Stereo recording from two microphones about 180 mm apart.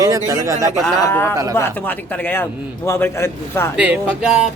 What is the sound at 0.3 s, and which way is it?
Speech, 20° right (ahead or behind).